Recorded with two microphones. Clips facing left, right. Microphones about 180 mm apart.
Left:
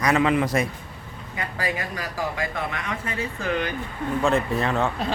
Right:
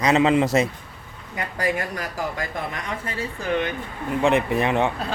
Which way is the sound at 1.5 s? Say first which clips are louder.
Right 4 dB; 50° right (ahead or behind).